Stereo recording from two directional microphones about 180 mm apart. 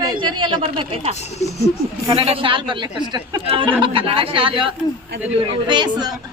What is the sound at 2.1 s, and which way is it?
Speech, 30° right (ahead or behind).